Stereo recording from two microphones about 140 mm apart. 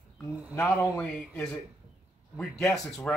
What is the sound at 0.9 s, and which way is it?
Speech, 10° left (ahead or behind).